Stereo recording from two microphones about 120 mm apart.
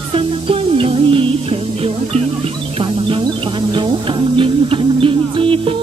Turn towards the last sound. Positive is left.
turn(degrees=-50)  # may be behind; listen again after turning